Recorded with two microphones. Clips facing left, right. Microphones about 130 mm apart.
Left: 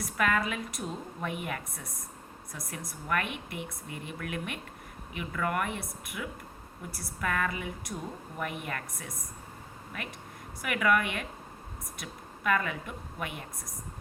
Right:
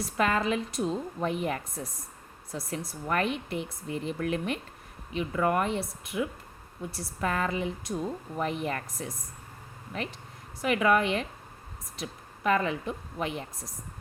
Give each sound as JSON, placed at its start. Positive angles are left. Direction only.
{"t": 0.2, "sound": "speech", "side_deg": -30}
{"t": 10.6, "sound": "a woman's voice", "side_deg": -30}